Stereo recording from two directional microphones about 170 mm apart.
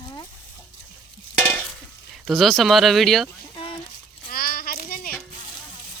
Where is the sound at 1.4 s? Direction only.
5° left (ahead or behind).